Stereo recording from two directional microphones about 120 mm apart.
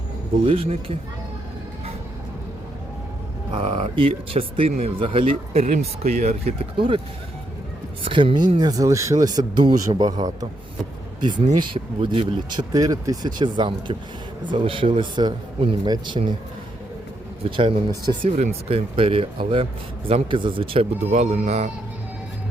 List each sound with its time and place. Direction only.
0.4 s speech: 50° right (ahead or behind)
3.5 s speech: 50° right (ahead or behind)
5.6 s speech: 65° right (ahead or behind)
6.7 s speech: 45° right (ahead or behind)
8.0 s speech: 45° right (ahead or behind)
11.2 s speech: 40° right (ahead or behind)
17.4 s speech: 50° right (ahead or behind)
18.3 s speech: 90° right
18.7 s speech: 50° right (ahead or behind)
21.1 s speech: 75° right (ahead or behind)